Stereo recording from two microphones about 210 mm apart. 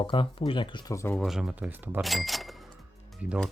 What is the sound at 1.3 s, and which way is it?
Speech, centre (ahead or behind).